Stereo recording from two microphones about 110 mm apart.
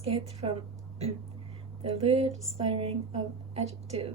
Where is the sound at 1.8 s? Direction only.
65° right (ahead or behind).